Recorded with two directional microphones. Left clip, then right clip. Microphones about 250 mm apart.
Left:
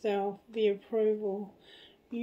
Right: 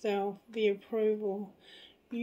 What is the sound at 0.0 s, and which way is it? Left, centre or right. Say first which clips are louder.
Speech: left 1 dB; right.